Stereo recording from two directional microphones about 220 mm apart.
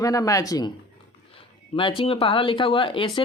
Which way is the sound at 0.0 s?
15° left (ahead or behind).